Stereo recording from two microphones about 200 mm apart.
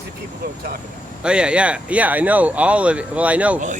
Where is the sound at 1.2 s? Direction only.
5° right (ahead or behind).